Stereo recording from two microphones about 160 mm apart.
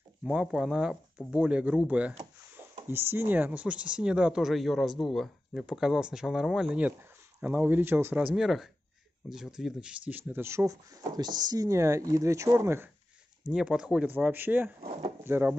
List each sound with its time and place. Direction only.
0.2 s speech: 5° right (ahead or behind)
13.5 s speech: 5° right (ahead or behind)